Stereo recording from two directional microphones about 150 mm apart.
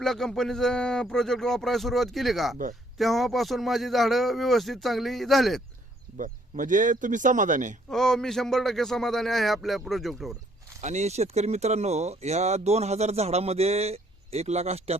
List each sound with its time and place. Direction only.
0.0 s speech: 5° left (ahead or behind)
6.1 s speech: 60° right (ahead or behind)
7.9 s speech: 5° left (ahead or behind)
10.8 s speech: 50° right (ahead or behind)